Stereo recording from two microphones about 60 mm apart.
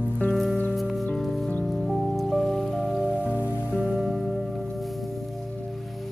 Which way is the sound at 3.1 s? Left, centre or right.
Right.